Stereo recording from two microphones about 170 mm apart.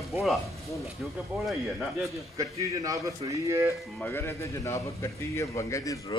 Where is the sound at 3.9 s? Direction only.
10° left (ahead or behind).